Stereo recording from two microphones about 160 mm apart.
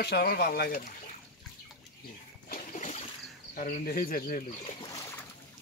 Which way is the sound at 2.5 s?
50° left (ahead or behind).